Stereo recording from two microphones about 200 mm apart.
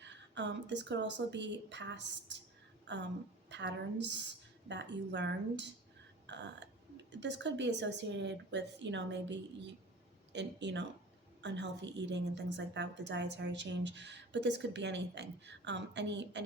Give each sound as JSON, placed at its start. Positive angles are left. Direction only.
{"t": 0.0, "sound": "a woman's voice", "side_deg": -60}